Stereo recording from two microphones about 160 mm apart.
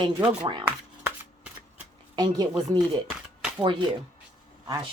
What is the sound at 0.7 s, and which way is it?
Shuffling cards, 10° right (ahead or behind).